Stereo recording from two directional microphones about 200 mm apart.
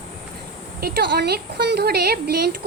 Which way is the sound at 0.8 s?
50° right (ahead or behind).